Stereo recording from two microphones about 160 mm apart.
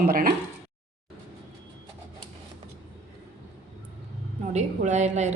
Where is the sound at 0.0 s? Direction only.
65° right (ahead or behind).